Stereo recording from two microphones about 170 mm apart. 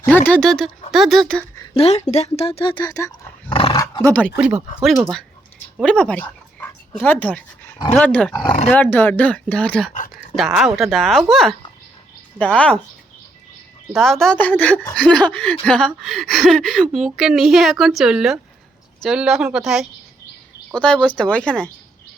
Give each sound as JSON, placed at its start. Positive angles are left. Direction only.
{"t": 0.0, "sound": "speech", "side_deg": 10}
{"t": 1.7, "sound": "speech", "side_deg": 40}
{"t": 3.5, "sound": "dog", "side_deg": 25}
{"t": 4.0, "sound": "speech", "side_deg": 10}
{"t": 4.4, "sound": "speech", "side_deg": -5}
{"t": 5.7, "sound": "dog", "side_deg": 5}
{"t": 7.9, "sound": "speech", "side_deg": 10}
{"t": 8.3, "sound": "speech", "side_deg": 25}
{"t": 8.7, "sound": "speech", "side_deg": 10}
{"t": 13.9, "sound": "speech", "side_deg": 0}